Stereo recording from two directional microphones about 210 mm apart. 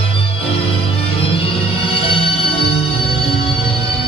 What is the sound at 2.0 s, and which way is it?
Music, 25° left (ahead or behind).